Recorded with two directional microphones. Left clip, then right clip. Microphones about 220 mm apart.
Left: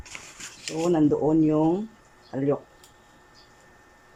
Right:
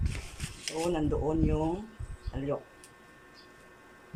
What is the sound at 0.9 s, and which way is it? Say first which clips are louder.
Speech: left 13 dB; 25° left (ahead or behind).